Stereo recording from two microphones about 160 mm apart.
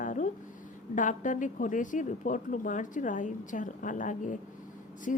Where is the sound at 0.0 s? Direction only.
55° left (ahead or behind).